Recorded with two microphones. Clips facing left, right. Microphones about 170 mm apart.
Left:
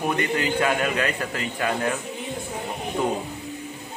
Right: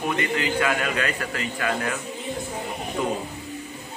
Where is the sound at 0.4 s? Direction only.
35° left (ahead or behind).